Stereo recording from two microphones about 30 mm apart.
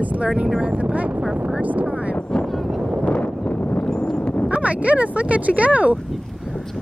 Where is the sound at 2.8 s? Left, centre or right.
Right.